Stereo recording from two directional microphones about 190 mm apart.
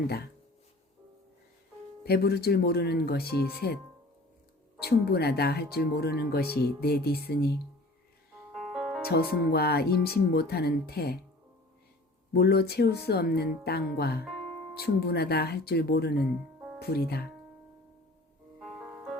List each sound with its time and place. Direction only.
2.0 s speech: 55° left (ahead or behind)
4.8 s speech: 55° left (ahead or behind)
8.5 s music: 5° right (ahead or behind)
9.0 s speech: 55° left (ahead or behind)
12.3 s speech: 55° left (ahead or behind)
18.6 s music: 5° right (ahead or behind)